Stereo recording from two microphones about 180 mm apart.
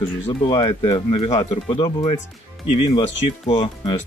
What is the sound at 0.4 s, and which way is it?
Speech, 30° left (ahead or behind).